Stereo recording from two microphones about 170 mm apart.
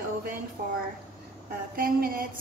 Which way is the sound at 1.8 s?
60° right (ahead or behind).